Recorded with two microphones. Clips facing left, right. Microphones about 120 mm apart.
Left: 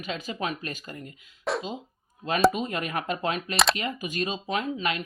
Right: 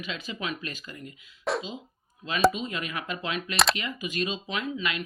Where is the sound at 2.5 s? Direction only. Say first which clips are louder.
Left 4 dB; 50° left (ahead or behind).